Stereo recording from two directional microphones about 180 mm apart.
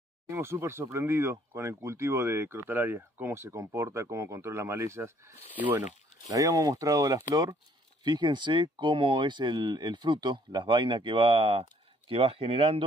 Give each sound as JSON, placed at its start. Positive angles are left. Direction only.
{"t": 0.3, "sound": "speech", "side_deg": -15}